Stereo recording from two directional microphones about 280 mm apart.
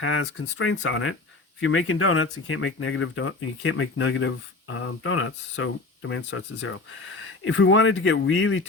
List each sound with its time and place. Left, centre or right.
0.0 s speech: left